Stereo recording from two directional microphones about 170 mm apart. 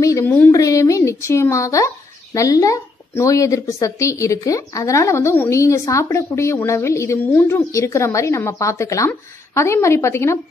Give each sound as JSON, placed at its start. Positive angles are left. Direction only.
{"t": 0.0, "sound": "speech", "side_deg": 20}